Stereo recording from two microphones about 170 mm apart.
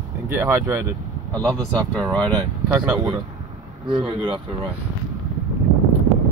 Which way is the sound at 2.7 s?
15° right (ahead or behind).